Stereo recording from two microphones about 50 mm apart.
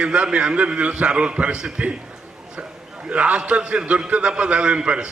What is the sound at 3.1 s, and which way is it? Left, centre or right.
A man's voice, right.